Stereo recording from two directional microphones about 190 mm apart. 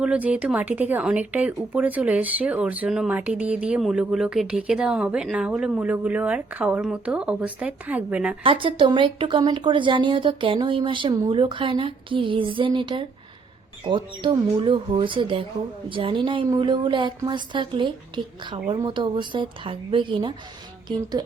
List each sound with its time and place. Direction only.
0.0 s speech: 5° right (ahead or behind)
8.4 s speech: 25° right (ahead or behind)